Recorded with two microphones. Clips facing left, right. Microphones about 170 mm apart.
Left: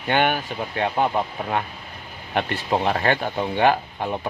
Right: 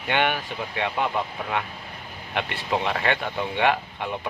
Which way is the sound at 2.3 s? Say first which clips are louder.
Left 4 dB; 40° left (ahead or behind).